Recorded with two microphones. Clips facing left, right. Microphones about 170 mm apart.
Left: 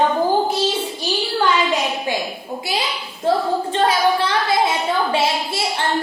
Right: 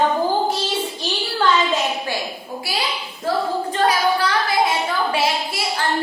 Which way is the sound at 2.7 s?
20° left (ahead or behind).